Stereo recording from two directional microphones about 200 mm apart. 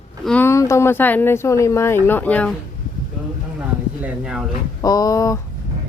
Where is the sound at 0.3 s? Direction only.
10° left (ahead or behind).